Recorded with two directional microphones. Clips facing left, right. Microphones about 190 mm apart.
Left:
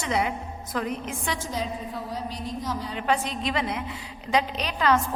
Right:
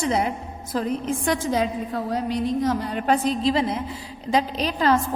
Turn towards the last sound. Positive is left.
turn(degrees=-35)  # may be behind; listen again after turning